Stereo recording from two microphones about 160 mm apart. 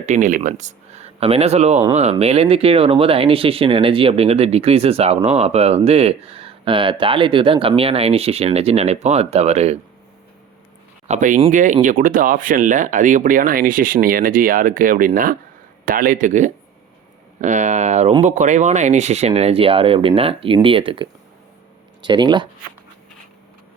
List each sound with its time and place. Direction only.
0.0 s speech: 50° right (ahead or behind)
11.1 s speech: 50° right (ahead or behind); by 22.4 s 30° right (ahead or behind)